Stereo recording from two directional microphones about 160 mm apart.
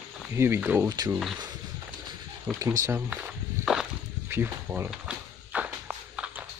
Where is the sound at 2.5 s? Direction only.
15° right (ahead or behind).